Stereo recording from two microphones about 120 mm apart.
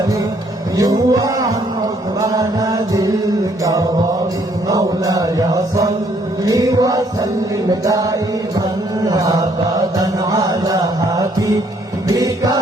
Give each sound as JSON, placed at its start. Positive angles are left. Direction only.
{"t": 0.8, "sound": "chant", "side_deg": -30}
{"t": 7.7, "sound": "music", "side_deg": -30}
{"t": 9.0, "sound": "chant", "side_deg": -30}
{"t": 12.0, "sound": "music", "side_deg": -30}